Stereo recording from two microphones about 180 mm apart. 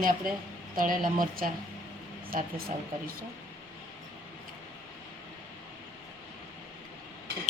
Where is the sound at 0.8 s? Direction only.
50° right (ahead or behind).